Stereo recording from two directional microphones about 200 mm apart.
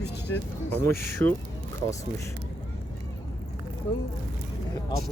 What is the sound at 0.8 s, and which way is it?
Speech, 15° left (ahead or behind).